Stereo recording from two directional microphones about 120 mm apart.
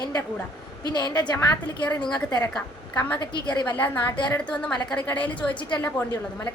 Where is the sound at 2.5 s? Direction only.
10° left (ahead or behind).